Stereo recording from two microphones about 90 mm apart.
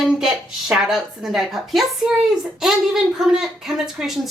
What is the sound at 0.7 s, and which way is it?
A woman's voice, 5° right (ahead or behind).